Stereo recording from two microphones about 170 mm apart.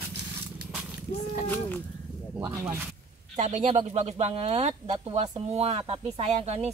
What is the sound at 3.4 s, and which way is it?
Speech, 40° right (ahead or behind).